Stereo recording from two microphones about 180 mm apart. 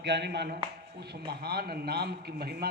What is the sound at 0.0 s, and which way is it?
A man's voice, 75° right (ahead or behind).